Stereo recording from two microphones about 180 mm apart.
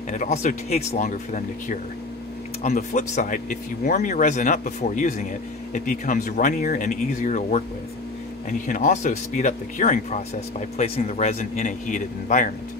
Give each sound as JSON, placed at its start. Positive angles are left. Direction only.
{"t": 0.1, "sound": "speech", "side_deg": 40}